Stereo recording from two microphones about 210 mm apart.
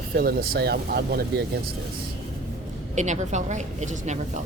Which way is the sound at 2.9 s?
35° right (ahead or behind).